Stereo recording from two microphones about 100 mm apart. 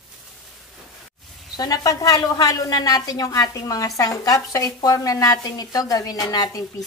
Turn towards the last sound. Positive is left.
turn(degrees=40)  # may be behind; listen again after turning